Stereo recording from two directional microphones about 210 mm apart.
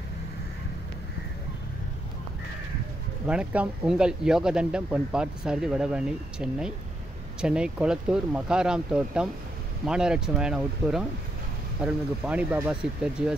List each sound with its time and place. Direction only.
3.3 s speech: 5° right (ahead or behind)